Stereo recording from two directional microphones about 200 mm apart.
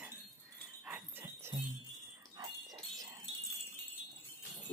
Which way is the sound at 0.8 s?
10° right (ahead or behind).